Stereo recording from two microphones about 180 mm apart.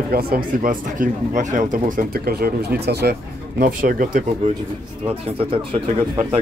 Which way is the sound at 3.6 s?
50° right (ahead or behind).